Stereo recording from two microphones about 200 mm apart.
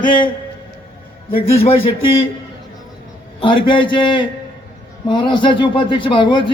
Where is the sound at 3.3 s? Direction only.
25° left (ahead or behind).